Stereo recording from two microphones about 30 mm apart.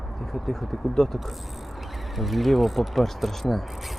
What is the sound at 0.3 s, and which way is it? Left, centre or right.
Speech, centre.